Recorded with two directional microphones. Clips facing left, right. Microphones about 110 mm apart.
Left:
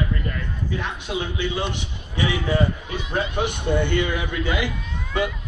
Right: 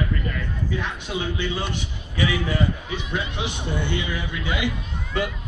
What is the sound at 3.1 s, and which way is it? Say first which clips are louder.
A man's voice: left 6 dB; 50° left (ahead or behind).